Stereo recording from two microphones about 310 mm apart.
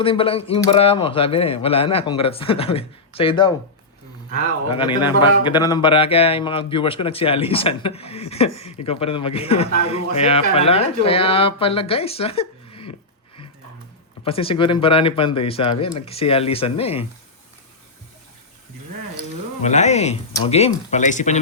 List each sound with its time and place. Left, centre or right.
0.0 s speech: centre
4.7 s speech: centre
14.3 s speech: centre
19.6 s speech: left